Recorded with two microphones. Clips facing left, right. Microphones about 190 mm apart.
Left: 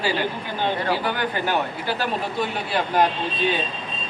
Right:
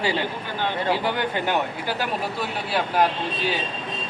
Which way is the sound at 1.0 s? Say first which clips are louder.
Even; 20° right (ahead or behind).